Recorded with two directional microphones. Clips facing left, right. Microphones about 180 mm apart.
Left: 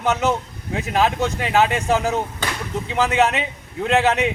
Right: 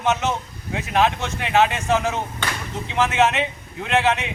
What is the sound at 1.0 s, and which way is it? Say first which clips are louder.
A man's voice: left 1 dB; 40° left (ahead or behind).